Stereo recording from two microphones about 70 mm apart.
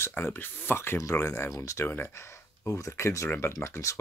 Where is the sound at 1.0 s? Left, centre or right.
Left.